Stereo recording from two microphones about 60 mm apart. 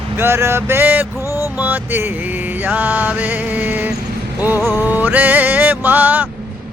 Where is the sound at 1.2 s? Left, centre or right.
Left.